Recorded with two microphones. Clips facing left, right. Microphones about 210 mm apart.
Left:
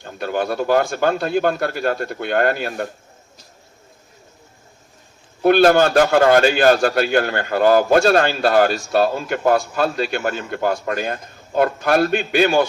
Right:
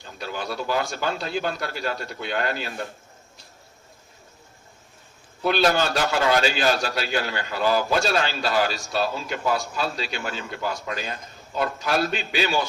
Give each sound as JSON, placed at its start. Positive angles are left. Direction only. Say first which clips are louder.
{"t": 0.0, "sound": "a man's voice", "louder": "left 9 dB", "side_deg": 55}
{"t": 5.4, "sound": "a man's voice", "louder": "left 9 dB", "side_deg": 50}